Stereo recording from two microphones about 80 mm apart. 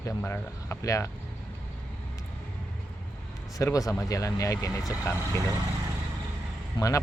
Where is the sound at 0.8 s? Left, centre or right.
Left.